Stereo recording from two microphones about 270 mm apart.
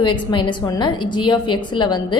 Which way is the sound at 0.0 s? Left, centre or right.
Centre.